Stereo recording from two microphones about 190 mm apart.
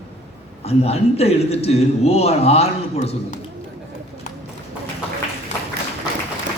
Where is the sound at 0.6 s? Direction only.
35° left (ahead or behind).